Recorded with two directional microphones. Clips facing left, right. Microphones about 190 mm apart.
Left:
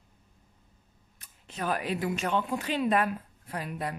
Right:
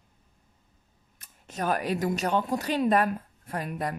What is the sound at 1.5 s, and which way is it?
A man's voice, 45° right (ahead or behind).